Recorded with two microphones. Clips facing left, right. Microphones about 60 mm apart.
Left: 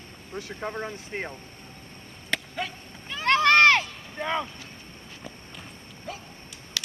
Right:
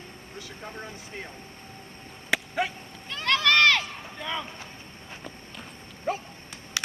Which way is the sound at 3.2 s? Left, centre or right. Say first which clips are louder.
Left 3 dB; left.